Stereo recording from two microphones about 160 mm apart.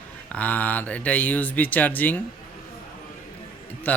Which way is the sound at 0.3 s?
10° left (ahead or behind).